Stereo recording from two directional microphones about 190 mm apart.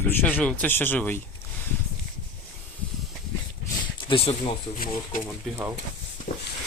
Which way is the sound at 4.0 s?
30° left (ahead or behind).